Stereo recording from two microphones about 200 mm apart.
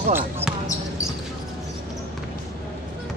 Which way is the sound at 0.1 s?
10° right (ahead or behind).